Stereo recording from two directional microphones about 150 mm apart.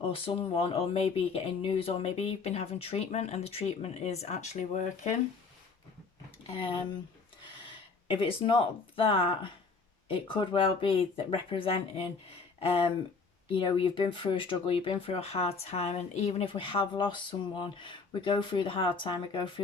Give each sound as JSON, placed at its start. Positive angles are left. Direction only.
{"t": 0.1, "sound": "speech", "side_deg": 40}
{"t": 7.6, "sound": "speech", "side_deg": 40}
{"t": 13.5, "sound": "speech", "side_deg": 35}